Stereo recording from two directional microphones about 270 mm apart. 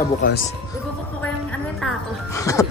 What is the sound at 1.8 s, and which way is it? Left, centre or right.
Music, centre.